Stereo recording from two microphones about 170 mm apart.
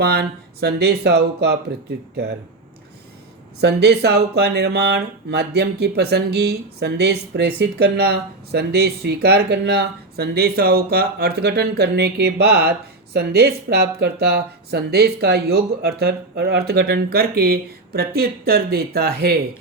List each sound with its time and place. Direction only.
0.0 s speech: 65° right (ahead or behind)
3.6 s speech: 80° right